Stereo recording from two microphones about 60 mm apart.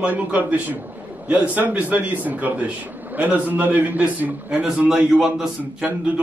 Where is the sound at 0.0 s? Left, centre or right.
Right.